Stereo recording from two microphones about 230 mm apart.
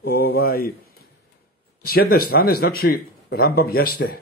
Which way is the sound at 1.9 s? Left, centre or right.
Left.